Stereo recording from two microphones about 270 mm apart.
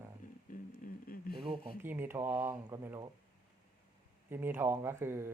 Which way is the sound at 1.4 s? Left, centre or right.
Centre.